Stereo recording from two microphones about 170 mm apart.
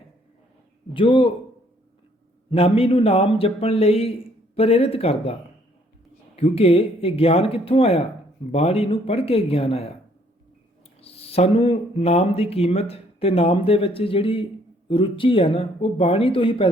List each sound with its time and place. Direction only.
0.9 s speech: 30° left (ahead or behind)
2.5 s speech: 35° left (ahead or behind)
11.0 s speech: 35° left (ahead or behind)